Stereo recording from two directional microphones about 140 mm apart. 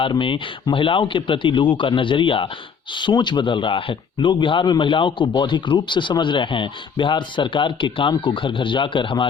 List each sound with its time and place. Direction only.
0.0 s speech: 35° left (ahead or behind)